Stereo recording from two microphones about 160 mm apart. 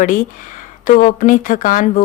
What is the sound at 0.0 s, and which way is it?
A woman's voice, 55° left (ahead or behind).